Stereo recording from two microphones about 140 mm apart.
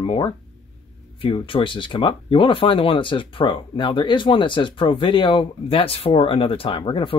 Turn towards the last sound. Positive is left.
turn(degrees=40)  # may be behind; listen again after turning